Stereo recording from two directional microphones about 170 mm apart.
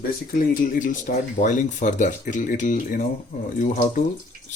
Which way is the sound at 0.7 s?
50° left (ahead or behind).